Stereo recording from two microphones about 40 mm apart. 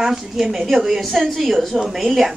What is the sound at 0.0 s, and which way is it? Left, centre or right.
A child's voice, centre.